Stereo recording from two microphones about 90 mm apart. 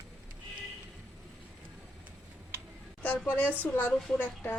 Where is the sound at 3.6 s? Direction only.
20° left (ahead or behind).